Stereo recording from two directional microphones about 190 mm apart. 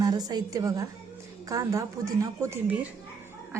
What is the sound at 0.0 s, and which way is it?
A woman's voice, 20° right (ahead or behind).